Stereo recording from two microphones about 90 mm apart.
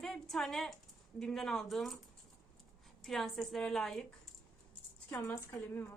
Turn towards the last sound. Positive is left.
turn(degrees=20)  # may be behind; listen again after turning